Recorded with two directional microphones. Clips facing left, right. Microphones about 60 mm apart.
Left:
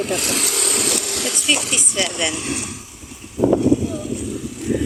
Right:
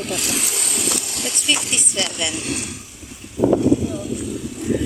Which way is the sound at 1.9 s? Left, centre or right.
Centre.